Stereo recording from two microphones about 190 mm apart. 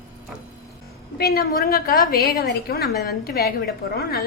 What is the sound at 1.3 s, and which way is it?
A woman's voice, 55° left (ahead or behind).